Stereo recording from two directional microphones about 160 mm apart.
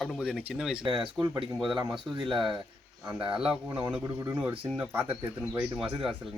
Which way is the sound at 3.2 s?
30° right (ahead or behind).